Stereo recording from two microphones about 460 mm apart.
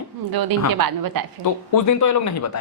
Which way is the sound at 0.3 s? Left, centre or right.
Right.